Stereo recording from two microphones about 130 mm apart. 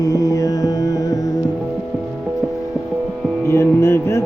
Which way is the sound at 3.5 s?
20° left (ahead or behind).